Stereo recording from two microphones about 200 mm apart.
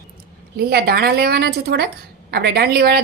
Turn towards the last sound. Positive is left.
turn(degrees=-50)  # may be behind; listen again after turning